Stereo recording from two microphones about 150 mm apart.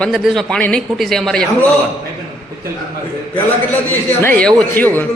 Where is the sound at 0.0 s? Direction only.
Centre (ahead or behind).